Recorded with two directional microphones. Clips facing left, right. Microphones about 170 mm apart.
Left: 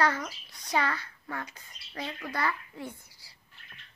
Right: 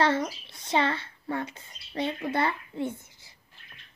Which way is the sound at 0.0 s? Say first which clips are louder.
Right 4 dB; 25° right (ahead or behind).